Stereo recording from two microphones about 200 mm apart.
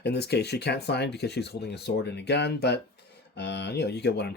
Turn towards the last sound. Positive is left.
turn(degrees=55)  # may be behind; listen again after turning